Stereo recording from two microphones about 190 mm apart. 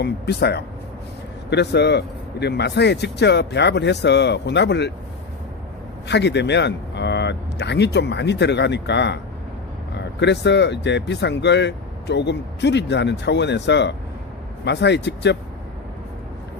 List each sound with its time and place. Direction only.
0.0 s speech: 60° left (ahead or behind)
6.1 s speech: 65° left (ahead or behind)
10.2 s speech: 65° left (ahead or behind)